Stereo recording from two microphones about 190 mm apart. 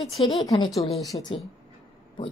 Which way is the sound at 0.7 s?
Centre (ahead or behind).